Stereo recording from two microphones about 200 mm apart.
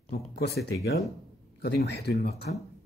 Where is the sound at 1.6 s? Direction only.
55° left (ahead or behind).